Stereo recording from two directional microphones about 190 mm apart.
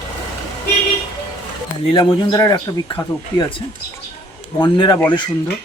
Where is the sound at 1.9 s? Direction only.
25° left (ahead or behind).